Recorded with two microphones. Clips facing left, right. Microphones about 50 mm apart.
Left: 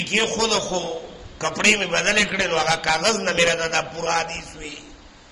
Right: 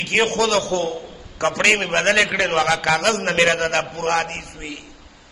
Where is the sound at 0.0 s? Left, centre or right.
Right.